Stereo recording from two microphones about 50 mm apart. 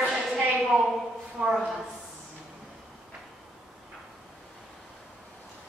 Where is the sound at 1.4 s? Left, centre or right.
Centre.